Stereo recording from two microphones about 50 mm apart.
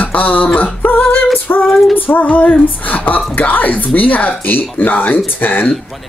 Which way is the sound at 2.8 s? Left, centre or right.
Left.